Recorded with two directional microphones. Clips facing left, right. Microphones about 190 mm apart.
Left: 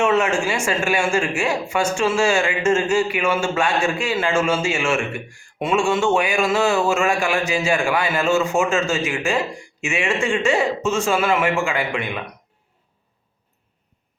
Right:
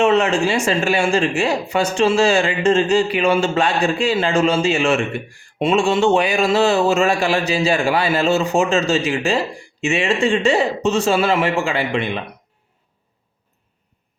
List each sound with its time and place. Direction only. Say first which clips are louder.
0.0 s a man's voice: right 3 dB; 35° right (ahead or behind)